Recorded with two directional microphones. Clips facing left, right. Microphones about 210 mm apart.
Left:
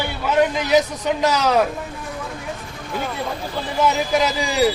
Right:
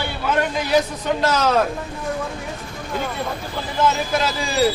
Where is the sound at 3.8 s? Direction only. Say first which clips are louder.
Left 1 dB; 15° left (ahead or behind).